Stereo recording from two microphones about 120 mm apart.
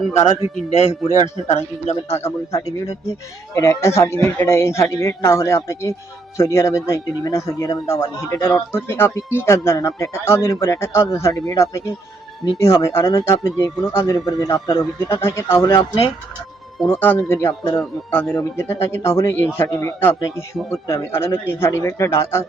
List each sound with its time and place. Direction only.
0.2 s a man's voice: 65° left (ahead or behind)
2.1 s a man's voice: 20° left (ahead or behind); by 15.1 s 35° left (ahead or behind)
15.1 s a man's voice: 25° left (ahead or behind)
16.8 s a man's voice: 20° left (ahead or behind)